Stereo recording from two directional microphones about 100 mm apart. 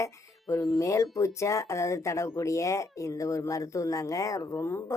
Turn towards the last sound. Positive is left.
turn(degrees=25)  # may be behind; listen again after turning